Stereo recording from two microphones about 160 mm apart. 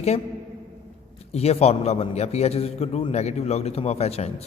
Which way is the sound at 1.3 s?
40° left (ahead or behind).